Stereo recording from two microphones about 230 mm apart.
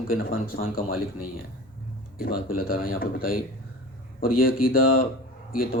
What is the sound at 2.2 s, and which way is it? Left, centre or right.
Speech, left.